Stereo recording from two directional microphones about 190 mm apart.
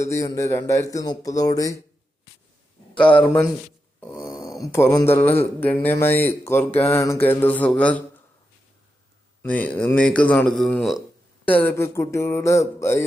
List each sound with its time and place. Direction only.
0.0 s speech: 15° left (ahead or behind)
3.0 s speech: 5° left (ahead or behind)
4.6 s speech: 15° left (ahead or behind)
9.4 s speech: 10° left (ahead or behind)